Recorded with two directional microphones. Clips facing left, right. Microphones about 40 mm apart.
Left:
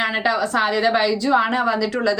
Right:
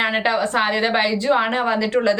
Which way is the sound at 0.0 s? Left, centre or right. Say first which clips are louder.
Right 1 dB; right.